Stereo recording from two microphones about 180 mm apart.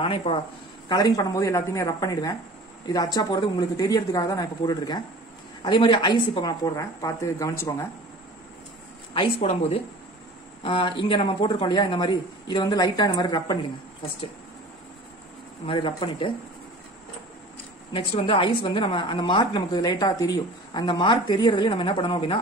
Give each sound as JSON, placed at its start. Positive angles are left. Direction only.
{"t": 0.0, "sound": "a woman's voice", "side_deg": 30}
{"t": 0.8, "sound": "a woman's voice", "side_deg": 20}
{"t": 9.1, "sound": "a woman's voice", "side_deg": 30}
{"t": 15.6, "sound": "a woman's voice", "side_deg": 25}
{"t": 17.9, "sound": "a woman's voice", "side_deg": 30}